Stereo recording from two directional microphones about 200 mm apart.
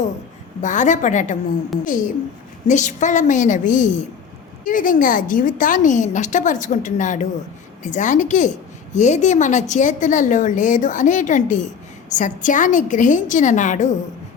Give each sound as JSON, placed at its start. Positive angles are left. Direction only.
{"t": 0.6, "sound": "a woman's voice", "side_deg": 40}